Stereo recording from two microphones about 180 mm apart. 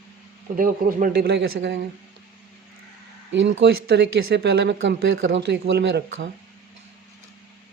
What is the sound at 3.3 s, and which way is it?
Speech, 90° right.